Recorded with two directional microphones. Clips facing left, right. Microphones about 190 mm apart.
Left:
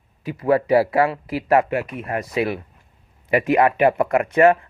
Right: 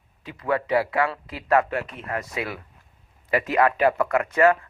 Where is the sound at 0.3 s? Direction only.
30° left (ahead or behind).